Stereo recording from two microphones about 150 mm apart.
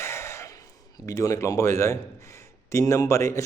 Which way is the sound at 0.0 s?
15° left (ahead or behind).